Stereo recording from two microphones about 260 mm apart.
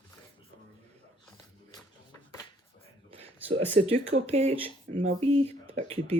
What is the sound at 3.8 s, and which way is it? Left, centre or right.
Speech, right.